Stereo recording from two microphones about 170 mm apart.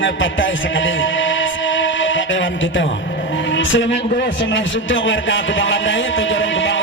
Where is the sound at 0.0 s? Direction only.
90° left.